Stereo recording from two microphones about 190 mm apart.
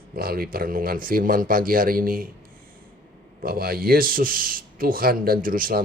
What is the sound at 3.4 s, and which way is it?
Speech, 50° right (ahead or behind).